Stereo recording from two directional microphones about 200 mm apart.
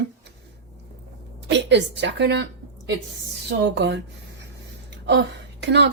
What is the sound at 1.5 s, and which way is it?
A woman's voice, 60° right (ahead or behind).